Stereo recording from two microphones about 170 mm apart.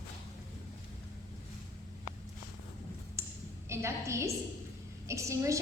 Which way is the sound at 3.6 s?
15° right (ahead or behind).